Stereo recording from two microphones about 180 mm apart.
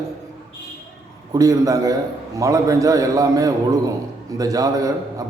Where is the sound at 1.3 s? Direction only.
20° right (ahead or behind).